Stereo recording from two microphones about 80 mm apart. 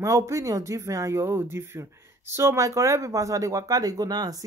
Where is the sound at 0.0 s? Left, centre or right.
Right.